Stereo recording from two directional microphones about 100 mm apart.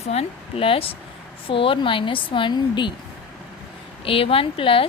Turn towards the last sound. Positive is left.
turn(degrees=65)  # may be behind; listen again after turning